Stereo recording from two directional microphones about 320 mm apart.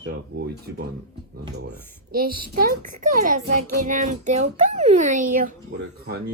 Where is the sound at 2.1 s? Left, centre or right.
Right.